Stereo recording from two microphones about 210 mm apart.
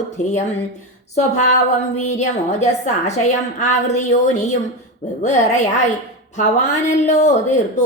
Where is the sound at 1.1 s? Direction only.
35° left (ahead or behind).